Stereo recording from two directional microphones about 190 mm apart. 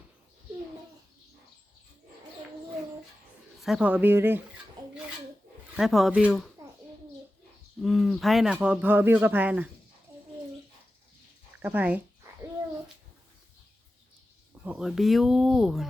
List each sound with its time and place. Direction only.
3.6 s speech: 5° right (ahead or behind)
5.7 s speech: centre (ahead or behind)
7.8 s speech: centre (ahead or behind)
11.6 s speech: 10° right (ahead or behind)
14.6 s speech: 5° right (ahead or behind)